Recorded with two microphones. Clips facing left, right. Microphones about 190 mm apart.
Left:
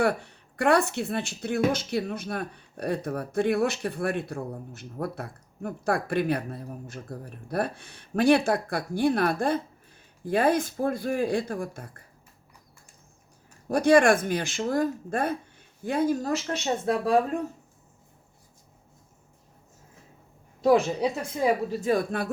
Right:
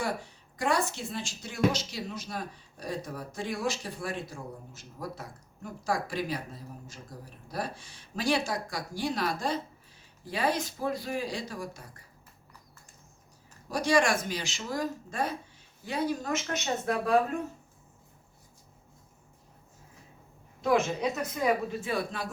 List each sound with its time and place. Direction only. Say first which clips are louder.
0.0 s speech: left 8 dB; 65° left (ahead or behind)
13.7 s speech: left 7 dB; 55° left (ahead or behind); by 17.2 s 30° left (ahead or behind)
20.6 s speech: left 5 dB; 35° left (ahead or behind); by 22.3 s 50° left (ahead or behind)